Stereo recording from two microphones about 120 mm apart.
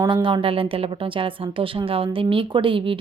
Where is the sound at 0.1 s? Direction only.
40° right (ahead or behind).